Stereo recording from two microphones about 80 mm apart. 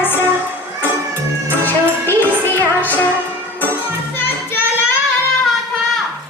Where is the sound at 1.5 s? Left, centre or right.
Left.